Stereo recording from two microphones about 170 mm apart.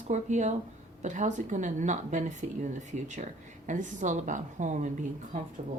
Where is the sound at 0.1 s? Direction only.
45° right (ahead or behind).